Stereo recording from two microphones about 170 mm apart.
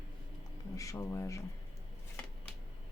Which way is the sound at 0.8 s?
15° left (ahead or behind).